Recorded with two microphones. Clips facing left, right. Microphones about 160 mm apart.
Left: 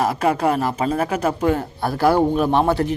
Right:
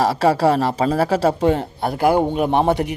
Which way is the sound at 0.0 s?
30° right (ahead or behind).